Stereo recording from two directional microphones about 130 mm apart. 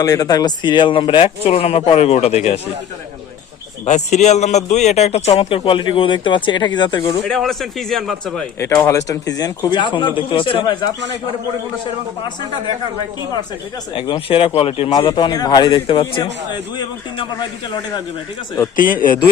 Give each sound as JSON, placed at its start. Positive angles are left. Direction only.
{"t": 0.0, "sound": "speech", "side_deg": 25}
{"t": 3.8, "sound": "a man's voice", "side_deg": 65}
{"t": 7.3, "sound": "a man's voice", "side_deg": 5}
{"t": 8.5, "sound": "speech", "side_deg": 25}
{"t": 13.9, "sound": "speech", "side_deg": 45}
{"t": 14.9, "sound": "speech", "side_deg": 35}
{"t": 18.8, "sound": "speech", "side_deg": 90}